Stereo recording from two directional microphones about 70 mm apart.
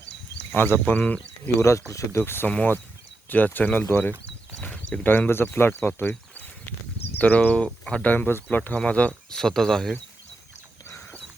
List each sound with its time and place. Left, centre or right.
0.5 s speech: left
1.5 s speech: left
6.0 s a sound: left
7.2 s speech: left
7.5 s speech: centre
8.0 s speech: left
9.3 s speech: centre